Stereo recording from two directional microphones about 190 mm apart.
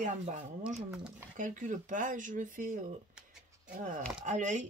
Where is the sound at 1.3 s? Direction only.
40° right (ahead or behind).